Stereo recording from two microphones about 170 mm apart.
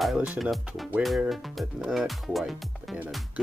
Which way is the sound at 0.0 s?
5° right (ahead or behind).